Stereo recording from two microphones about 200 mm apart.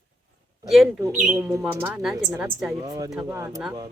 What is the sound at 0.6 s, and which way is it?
Speech, centre (ahead or behind).